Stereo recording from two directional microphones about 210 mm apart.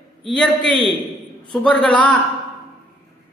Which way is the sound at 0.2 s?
5° left (ahead or behind).